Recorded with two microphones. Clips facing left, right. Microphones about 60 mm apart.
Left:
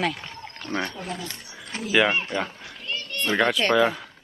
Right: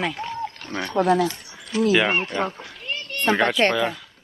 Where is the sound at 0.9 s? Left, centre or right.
Right.